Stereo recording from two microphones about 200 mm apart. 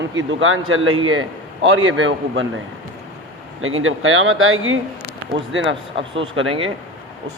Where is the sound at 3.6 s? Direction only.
90° right.